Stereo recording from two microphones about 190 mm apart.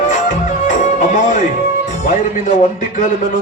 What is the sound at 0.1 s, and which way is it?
Music, 40° left (ahead or behind).